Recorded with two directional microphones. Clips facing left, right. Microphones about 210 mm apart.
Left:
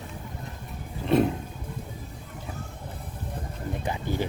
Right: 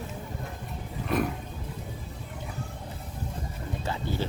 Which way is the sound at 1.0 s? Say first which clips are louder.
Left 6 dB; 25° left (ahead or behind).